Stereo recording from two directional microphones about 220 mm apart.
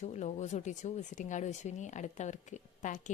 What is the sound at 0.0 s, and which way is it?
Speech, 30° left (ahead or behind).